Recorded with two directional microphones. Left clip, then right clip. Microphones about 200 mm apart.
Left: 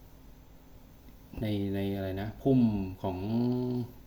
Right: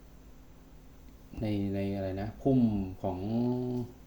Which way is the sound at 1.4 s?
Centre (ahead or behind).